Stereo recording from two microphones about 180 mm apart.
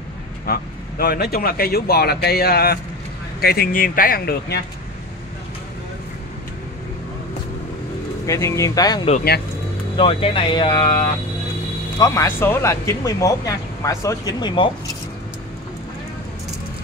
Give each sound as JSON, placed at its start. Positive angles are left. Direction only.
{"t": 0.5, "sound": "speech", "side_deg": 55}
{"t": 8.3, "sound": "speech", "side_deg": 15}
{"t": 9.9, "sound": "speech", "side_deg": 30}
{"t": 12.0, "sound": "speech", "side_deg": 15}